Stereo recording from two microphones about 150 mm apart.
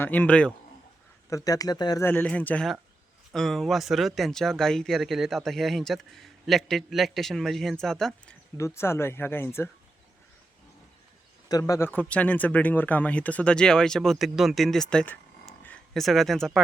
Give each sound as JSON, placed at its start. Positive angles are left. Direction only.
{"t": 0.0, "sound": "speech", "side_deg": 10}
{"t": 1.3, "sound": "speech", "side_deg": 25}
{"t": 2.0, "sound": "speech", "side_deg": 10}
{"t": 8.5, "sound": "speech", "side_deg": 20}
{"t": 11.4, "sound": "speech", "side_deg": 25}